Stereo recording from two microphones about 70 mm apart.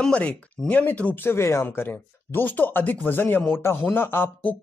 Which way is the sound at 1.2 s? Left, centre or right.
Left.